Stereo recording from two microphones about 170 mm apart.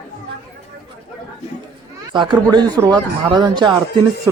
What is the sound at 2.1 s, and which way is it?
Speech, 25° right (ahead or behind).